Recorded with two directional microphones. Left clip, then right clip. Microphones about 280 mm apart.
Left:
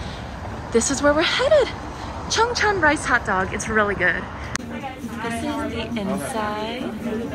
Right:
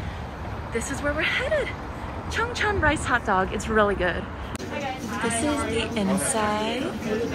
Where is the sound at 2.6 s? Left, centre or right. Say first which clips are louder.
Left 5 dB; centre.